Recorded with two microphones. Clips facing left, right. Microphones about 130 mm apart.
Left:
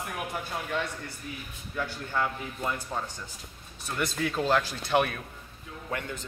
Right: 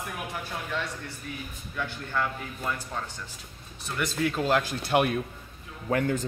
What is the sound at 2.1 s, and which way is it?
Speech, 15° left (ahead or behind).